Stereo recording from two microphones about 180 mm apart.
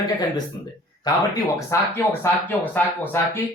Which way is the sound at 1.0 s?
20° left (ahead or behind).